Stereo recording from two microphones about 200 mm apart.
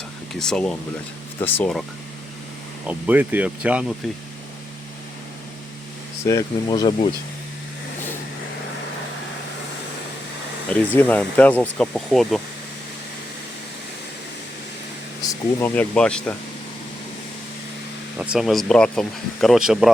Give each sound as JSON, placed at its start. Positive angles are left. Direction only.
{"t": 0.3, "sound": "speech", "side_deg": 5}
{"t": 2.8, "sound": "speech", "side_deg": -10}
{"t": 6.2, "sound": "speech", "side_deg": 20}
{"t": 10.7, "sound": "speech", "side_deg": 5}
{"t": 15.2, "sound": "speech", "side_deg": 15}
{"t": 18.2, "sound": "speech", "side_deg": -5}